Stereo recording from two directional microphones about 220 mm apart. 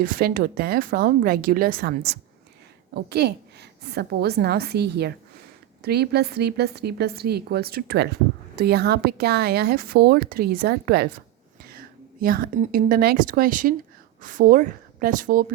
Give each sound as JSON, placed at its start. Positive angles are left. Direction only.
{"t": 0.0, "sound": "a woman's voice", "side_deg": -40}
{"t": 12.2, "sound": "a woman's voice", "side_deg": -40}